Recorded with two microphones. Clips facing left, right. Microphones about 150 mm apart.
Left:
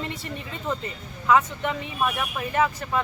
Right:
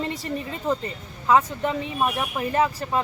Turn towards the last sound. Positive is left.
turn(degrees=-30)  # may be behind; listen again after turning